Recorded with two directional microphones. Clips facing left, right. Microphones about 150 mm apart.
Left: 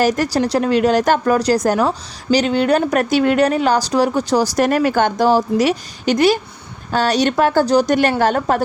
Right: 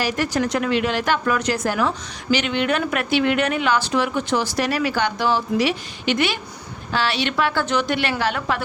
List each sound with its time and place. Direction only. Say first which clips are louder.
0.0 s speech: left 6 dB; 40° left (ahead or behind)